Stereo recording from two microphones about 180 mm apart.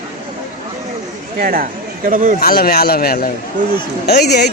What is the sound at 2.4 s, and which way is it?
Speech, 55° left (ahead or behind).